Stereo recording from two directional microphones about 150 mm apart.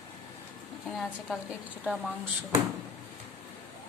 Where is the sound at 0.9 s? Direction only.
Centre (ahead or behind).